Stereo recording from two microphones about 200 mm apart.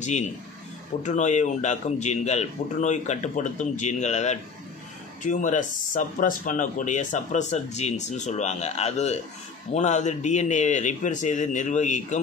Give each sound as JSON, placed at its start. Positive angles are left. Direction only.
{"t": 0.0, "sound": "speech", "side_deg": 35}